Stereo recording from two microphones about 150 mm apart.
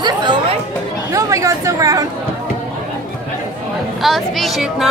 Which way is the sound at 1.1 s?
20° right (ahead or behind).